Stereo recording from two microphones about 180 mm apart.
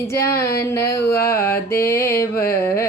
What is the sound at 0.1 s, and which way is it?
Speech, 15° left (ahead or behind).